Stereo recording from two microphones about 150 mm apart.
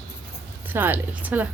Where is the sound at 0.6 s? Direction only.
15° right (ahead or behind).